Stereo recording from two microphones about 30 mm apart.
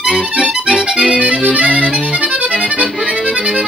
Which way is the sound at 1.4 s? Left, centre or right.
Right.